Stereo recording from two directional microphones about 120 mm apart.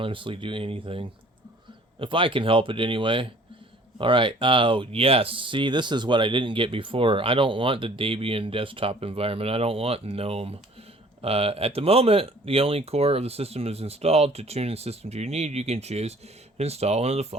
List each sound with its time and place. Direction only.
0.0 s speech: 45° right (ahead or behind); by 17.2 s 60° right (ahead or behind)